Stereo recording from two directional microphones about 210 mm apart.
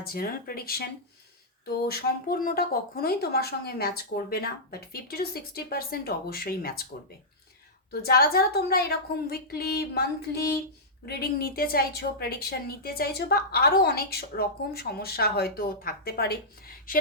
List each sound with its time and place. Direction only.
0.0 s a woman's voice: 45° left (ahead or behind)
8.0 s a woman's voice: 45° left (ahead or behind)